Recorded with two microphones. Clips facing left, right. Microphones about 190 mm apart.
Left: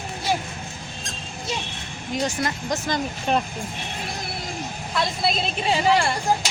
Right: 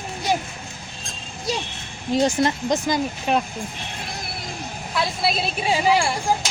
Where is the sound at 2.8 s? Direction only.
15° right (ahead or behind).